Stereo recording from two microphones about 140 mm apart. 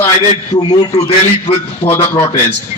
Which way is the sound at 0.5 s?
35° left (ahead or behind).